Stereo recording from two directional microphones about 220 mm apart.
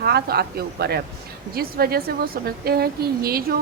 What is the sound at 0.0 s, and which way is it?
A woman's voice, 45° right (ahead or behind).